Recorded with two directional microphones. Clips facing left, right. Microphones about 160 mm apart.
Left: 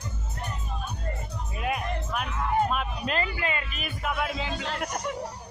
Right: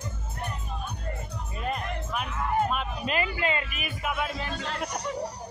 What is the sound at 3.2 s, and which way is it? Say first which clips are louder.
Speech: right 2 dB; 25° right (ahead or behind).